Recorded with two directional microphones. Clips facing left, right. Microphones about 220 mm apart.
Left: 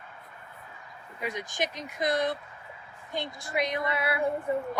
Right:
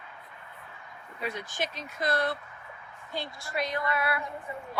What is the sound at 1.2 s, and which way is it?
A woman's voice, 15° left (ahead or behind).